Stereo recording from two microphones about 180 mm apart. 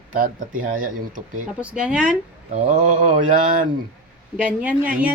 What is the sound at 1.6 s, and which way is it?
Speech, 5° right (ahead or behind).